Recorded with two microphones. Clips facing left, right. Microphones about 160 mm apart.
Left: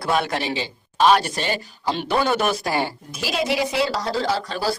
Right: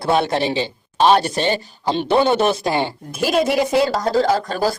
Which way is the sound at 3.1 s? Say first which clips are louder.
Right 7 dB; 50° right (ahead or behind).